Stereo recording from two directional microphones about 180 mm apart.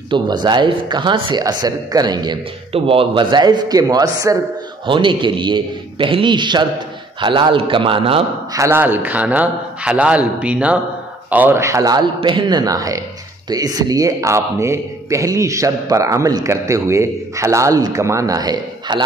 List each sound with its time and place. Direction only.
0.1 s speech: 25° right (ahead or behind)
8.5 s a man's voice: 15° right (ahead or behind)